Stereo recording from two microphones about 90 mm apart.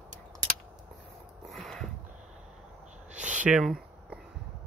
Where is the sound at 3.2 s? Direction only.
15° right (ahead or behind).